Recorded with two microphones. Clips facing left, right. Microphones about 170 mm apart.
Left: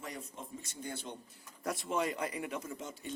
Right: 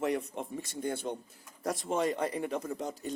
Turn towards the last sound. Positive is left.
turn(degrees=-40)  # may be behind; listen again after turning